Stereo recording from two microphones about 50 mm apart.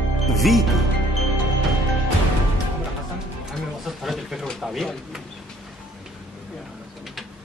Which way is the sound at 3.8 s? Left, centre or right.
Centre.